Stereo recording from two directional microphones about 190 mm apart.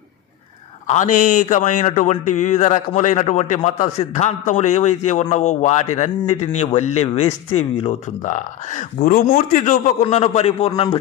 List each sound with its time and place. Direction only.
0.8 s a man's voice: 40° left (ahead or behind)